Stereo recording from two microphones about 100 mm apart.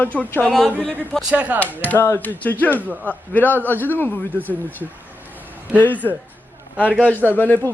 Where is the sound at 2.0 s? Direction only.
20° left (ahead or behind).